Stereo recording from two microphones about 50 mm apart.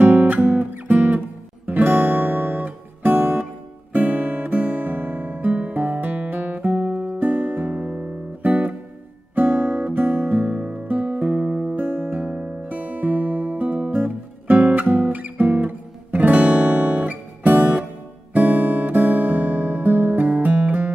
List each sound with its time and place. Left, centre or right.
0.0 s guitar: right
1.7 s music: right
11.7 s music: right